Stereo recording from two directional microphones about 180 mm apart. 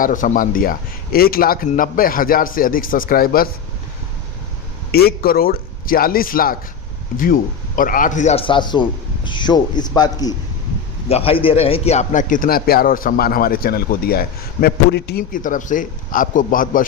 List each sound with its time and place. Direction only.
0.0 s a man's voice: 45° left (ahead or behind)
4.9 s a man's voice: 60° left (ahead or behind)
7.8 s a man's voice: 50° left (ahead or behind); by 10.3 s 20° left (ahead or behind)
11.1 s a man's voice: 30° left (ahead or behind); by 16.8 s 50° left (ahead or behind)